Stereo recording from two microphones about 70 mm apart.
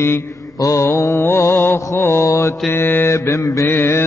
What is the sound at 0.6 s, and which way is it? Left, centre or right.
Mantra, left.